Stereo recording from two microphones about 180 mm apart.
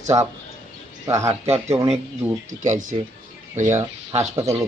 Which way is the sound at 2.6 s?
45° right (ahead or behind).